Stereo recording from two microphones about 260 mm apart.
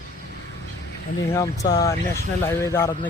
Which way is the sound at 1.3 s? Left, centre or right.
Centre.